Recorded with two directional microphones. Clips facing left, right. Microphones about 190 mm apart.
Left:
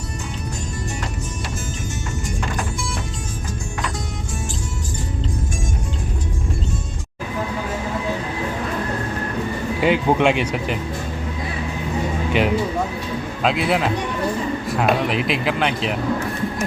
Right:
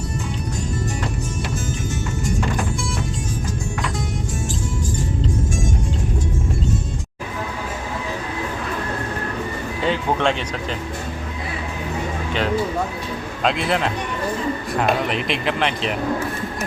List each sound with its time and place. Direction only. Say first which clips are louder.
9.8 s speech: left 4 dB; 10° left (ahead or behind)
12.3 s speech: left 2 dB; 15° left (ahead or behind)